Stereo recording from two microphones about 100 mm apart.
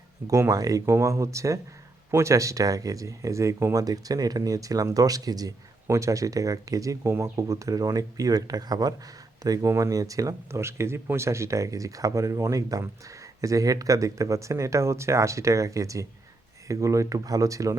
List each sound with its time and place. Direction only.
0.3 s speech: 30° right (ahead or behind)